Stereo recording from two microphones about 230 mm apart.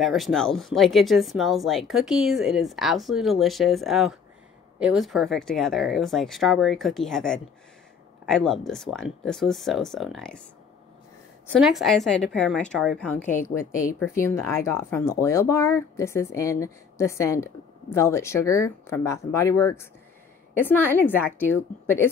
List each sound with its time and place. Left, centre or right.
0.0 s speech: centre
11.4 s speech: centre
13.7 s speech: left
13.9 s speech: centre